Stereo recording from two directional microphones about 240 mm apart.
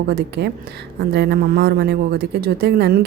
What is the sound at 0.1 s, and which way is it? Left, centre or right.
Speech, right.